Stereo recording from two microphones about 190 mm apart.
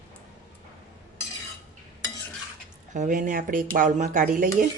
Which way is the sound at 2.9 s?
45° right (ahead or behind).